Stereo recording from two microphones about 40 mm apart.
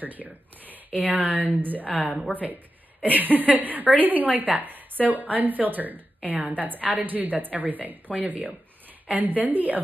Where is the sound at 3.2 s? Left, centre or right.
Right.